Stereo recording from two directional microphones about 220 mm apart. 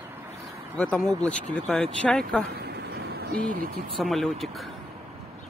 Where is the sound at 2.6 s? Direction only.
45° right (ahead or behind).